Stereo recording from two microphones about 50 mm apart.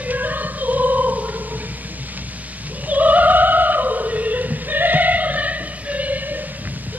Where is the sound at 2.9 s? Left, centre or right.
Right.